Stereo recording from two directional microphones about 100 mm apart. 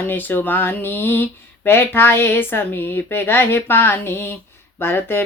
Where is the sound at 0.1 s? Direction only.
20° left (ahead or behind).